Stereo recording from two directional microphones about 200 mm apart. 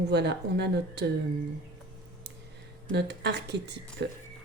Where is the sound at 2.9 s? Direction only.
55° right (ahead or behind).